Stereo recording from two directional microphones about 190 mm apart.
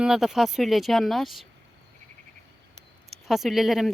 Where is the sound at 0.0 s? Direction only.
Centre (ahead or behind).